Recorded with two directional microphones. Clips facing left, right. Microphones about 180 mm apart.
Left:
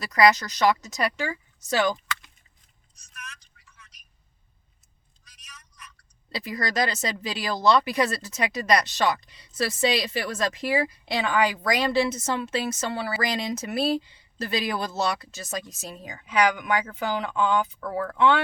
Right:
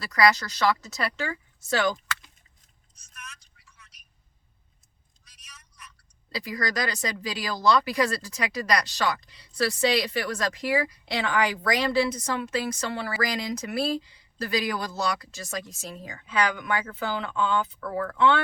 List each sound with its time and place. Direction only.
0.0 s speech: 20° left (ahead or behind)
6.3 s speech: 25° left (ahead or behind)